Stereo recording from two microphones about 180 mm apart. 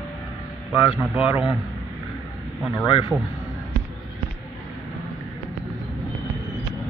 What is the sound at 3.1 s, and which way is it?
Speech, 5° right (ahead or behind).